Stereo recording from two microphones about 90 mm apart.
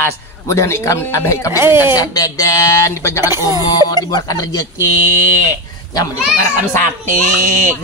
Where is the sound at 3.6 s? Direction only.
50° left (ahead or behind).